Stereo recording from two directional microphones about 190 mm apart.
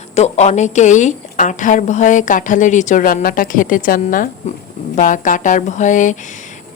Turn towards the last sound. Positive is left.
turn(degrees=40)  # may be behind; listen again after turning